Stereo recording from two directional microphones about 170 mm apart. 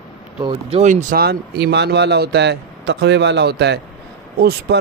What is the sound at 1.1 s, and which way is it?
Speech, 65° right (ahead or behind).